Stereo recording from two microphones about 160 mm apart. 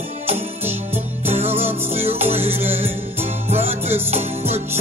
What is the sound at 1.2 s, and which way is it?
Music, 40° right (ahead or behind).